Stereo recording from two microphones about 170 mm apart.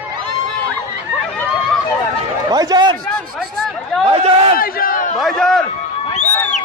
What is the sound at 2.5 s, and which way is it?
Speech, 25° right (ahead or behind).